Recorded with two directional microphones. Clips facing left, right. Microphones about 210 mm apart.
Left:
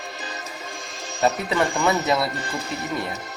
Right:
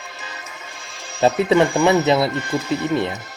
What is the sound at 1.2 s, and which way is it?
A man's voice, 25° right (ahead or behind).